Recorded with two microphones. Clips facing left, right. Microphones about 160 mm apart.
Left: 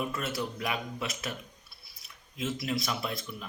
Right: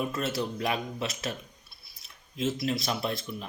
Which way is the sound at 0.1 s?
25° right (ahead or behind).